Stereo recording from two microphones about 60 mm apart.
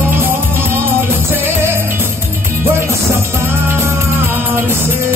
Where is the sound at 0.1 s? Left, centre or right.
Right.